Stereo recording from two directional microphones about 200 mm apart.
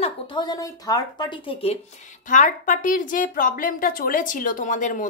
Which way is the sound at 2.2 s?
40° left (ahead or behind).